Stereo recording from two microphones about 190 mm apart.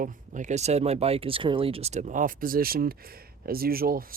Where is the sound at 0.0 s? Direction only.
40° right (ahead or behind).